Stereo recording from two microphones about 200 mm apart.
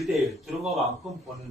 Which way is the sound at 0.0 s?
Centre (ahead or behind).